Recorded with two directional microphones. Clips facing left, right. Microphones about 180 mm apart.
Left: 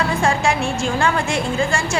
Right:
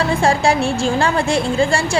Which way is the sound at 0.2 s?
35° right (ahead or behind).